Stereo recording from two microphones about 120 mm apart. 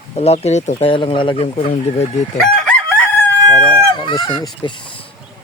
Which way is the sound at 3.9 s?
40° left (ahead or behind).